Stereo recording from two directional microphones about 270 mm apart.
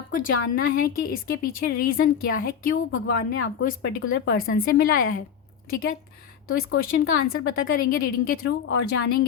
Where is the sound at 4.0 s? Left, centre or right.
Left.